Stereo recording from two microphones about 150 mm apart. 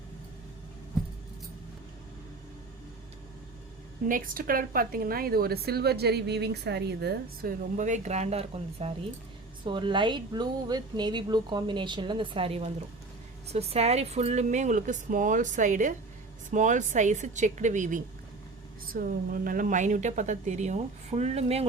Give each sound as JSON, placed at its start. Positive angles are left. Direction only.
{"t": 4.1, "sound": "a woman's voice", "side_deg": -70}
{"t": 7.8, "sound": "speech", "side_deg": -55}
{"t": 9.6, "sound": "speech", "side_deg": -30}
{"t": 18.9, "sound": "speech", "side_deg": -70}